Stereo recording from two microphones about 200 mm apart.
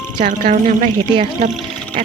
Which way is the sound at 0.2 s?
45° right (ahead or behind).